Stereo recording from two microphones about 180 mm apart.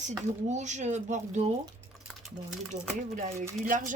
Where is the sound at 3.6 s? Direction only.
45° right (ahead or behind).